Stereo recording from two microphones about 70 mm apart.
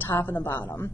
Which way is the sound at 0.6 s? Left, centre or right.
Left.